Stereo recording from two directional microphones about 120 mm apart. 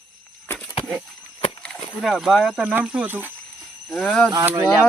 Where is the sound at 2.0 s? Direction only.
Centre (ahead or behind).